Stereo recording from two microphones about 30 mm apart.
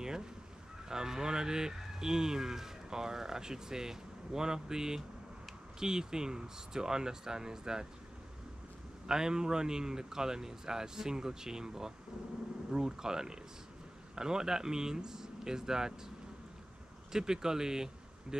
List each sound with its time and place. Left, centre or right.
0.0 s fowl: right
0.8 s speech: centre
9.0 s speech: right
17.1 s speech: right